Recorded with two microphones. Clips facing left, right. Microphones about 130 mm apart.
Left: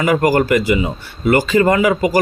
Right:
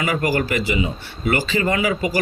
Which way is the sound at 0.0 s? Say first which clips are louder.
Left 7 dB; 45° left (ahead or behind).